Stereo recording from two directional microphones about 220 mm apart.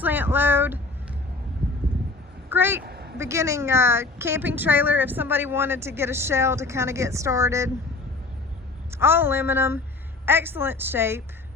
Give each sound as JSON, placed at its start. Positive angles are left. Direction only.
{"t": 0.0, "sound": "speech", "side_deg": -10}
{"t": 2.5, "sound": "speech", "side_deg": -10}
{"t": 2.8, "sound": "a sound", "side_deg": -45}
{"t": 3.2, "sound": "a woman's voice", "side_deg": -15}
{"t": 8.9, "sound": "a woman's voice", "side_deg": -10}